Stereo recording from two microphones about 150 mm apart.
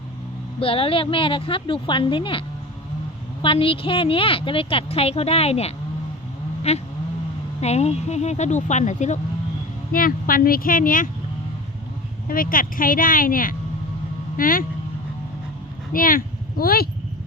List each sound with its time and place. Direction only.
0.6 s a woman's voice: 40° left (ahead or behind)
3.4 s a woman's voice: 35° left (ahead or behind)
6.6 s vehicle: 45° left (ahead or behind)
7.6 s speech: 45° left (ahead or behind)
9.9 s speech: 75° left (ahead or behind)
12.3 s speech: 70° left (ahead or behind)
15.9 s speech: 70° left (ahead or behind); by 16.9 s 90° left